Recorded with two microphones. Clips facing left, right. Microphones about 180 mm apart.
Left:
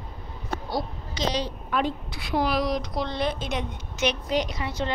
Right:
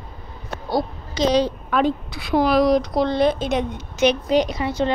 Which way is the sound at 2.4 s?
40° right (ahead or behind).